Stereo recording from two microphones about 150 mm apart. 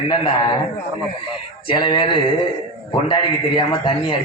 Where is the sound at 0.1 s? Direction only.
30° left (ahead or behind).